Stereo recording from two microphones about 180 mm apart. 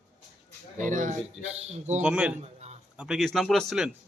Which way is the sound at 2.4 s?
35° right (ahead or behind).